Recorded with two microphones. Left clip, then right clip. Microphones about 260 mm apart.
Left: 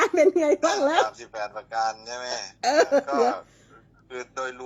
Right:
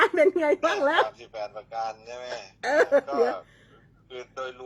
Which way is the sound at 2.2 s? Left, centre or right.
Left.